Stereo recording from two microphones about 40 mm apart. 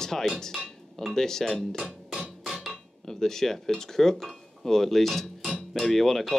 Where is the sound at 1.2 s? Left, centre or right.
Centre.